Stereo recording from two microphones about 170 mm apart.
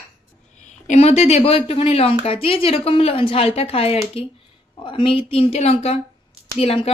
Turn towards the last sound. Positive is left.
turn(degrees=35)  # may be behind; listen again after turning